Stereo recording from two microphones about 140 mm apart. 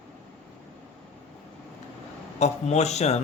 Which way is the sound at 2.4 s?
50° left (ahead or behind).